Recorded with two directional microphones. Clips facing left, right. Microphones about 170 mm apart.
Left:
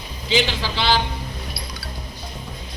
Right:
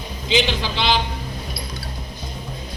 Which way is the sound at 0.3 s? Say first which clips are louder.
Right 1 dB; 20° right (ahead or behind).